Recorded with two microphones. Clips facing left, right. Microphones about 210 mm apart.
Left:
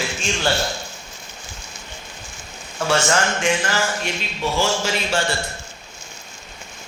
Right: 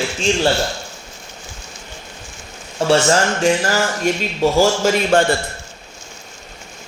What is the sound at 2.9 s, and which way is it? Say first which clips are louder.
Speech: right 5 dB; 35° right (ahead or behind).